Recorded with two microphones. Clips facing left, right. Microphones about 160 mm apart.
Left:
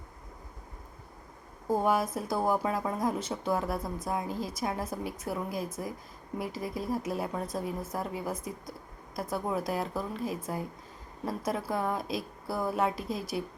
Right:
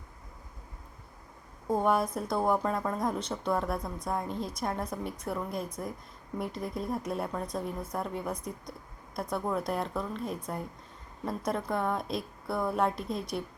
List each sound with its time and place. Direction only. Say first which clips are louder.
1.6 s a woman's voice: even; 5° left (ahead or behind)